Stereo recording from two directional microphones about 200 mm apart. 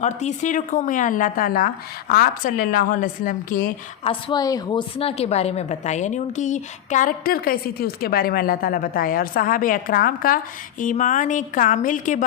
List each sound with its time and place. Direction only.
0.0 s a woman's voice: 35° left (ahead or behind)
4.1 s a woman's voice: 20° left (ahead or behind)
4.9 s a woman's voice: 30° left (ahead or behind)